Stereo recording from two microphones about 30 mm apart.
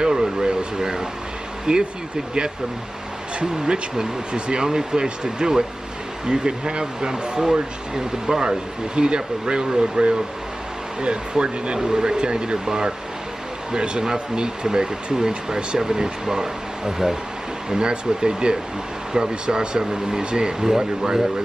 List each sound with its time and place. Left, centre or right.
0.0 s a sound: right
1.7 s speech: right
3.3 s speech: right
3.9 s speech: right
8.5 s speech: right
11.8 s speech: right